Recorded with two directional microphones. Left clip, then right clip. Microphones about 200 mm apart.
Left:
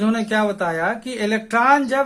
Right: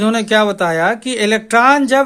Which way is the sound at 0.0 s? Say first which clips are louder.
Right 7 dB; 40° right (ahead or behind).